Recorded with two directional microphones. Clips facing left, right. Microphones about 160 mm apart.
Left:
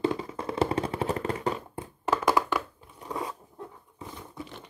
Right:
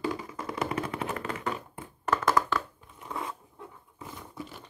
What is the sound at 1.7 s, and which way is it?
Tap, 15° left (ahead or behind).